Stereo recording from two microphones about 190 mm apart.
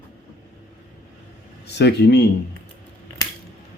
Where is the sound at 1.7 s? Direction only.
60° left (ahead or behind).